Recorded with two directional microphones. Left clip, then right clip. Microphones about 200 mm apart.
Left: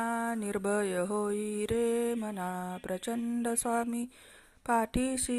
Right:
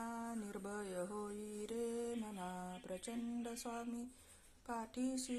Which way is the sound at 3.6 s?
40° left (ahead or behind).